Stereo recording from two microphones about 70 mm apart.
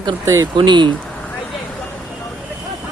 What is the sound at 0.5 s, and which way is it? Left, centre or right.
Speech, right.